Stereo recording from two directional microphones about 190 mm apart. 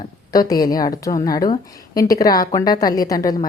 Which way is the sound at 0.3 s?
20° left (ahead or behind).